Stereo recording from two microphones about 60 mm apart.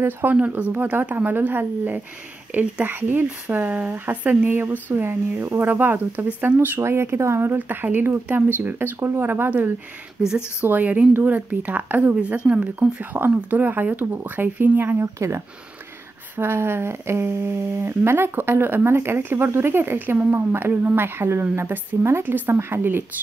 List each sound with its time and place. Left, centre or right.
0.0 s a woman's voice: right
4.5 s a woman's voice: right
6.8 s speech: right
7.5 s a woman's voice: right
10.2 s speech: centre
10.6 s speech: right
12.4 s speech: centre
13.1 s a woman's voice: right
15.1 s a woman's voice: right